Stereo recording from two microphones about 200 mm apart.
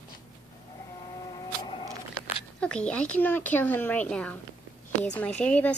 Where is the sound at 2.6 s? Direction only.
5° left (ahead or behind).